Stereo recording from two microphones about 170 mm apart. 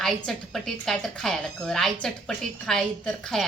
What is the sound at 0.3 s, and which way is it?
A woman's voice, centre (ahead or behind).